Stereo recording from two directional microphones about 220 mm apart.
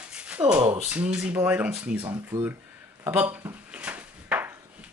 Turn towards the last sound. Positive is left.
turn(degrees=-10)  # may be behind; listen again after turning